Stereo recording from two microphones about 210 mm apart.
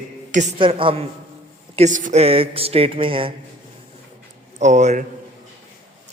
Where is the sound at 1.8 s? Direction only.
35° right (ahead or behind).